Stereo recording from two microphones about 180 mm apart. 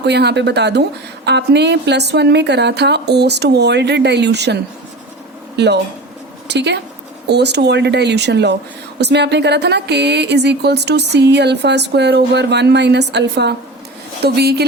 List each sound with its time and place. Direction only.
0.0 s a woman's voice: 70° right (ahead or behind)
5.5 s a woman's voice: 70° right (ahead or behind)